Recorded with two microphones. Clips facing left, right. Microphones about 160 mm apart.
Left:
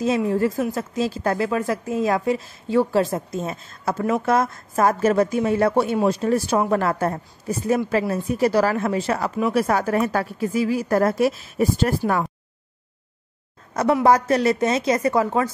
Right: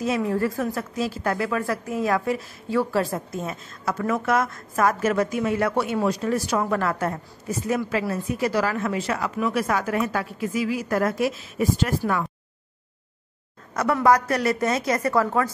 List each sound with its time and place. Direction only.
0.0 s a woman's voice: 25° left (ahead or behind)
14.0 s a woman's voice: 25° left (ahead or behind)